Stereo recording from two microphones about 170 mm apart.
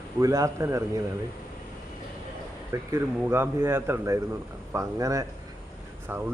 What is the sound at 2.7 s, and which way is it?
Speech, 15° right (ahead or behind).